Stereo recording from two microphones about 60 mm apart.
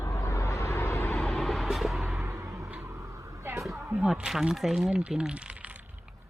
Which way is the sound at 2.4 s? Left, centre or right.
Right.